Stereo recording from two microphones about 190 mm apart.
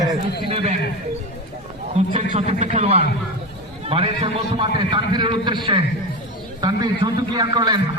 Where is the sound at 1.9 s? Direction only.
35° right (ahead or behind).